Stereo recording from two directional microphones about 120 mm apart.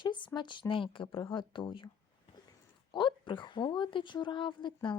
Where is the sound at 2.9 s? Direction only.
40° left (ahead or behind).